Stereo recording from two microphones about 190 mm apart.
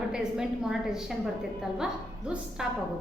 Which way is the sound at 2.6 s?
5° right (ahead or behind).